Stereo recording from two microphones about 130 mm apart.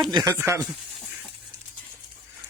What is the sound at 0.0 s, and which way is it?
Speech, 35° right (ahead or behind).